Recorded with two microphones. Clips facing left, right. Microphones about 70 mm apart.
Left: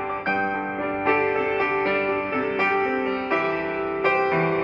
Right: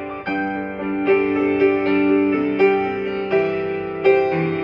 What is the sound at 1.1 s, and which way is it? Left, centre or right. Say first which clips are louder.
Music: right 5 dB; left.